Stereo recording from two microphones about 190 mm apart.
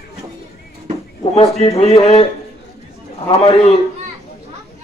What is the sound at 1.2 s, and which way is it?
A man's voice, 30° left (ahead or behind).